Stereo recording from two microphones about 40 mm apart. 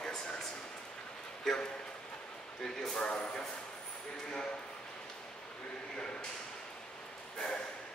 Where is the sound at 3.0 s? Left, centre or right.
Left.